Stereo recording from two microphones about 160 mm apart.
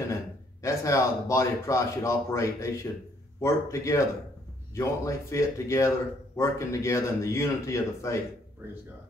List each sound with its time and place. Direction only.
0.6 s speech: 20° left (ahead or behind)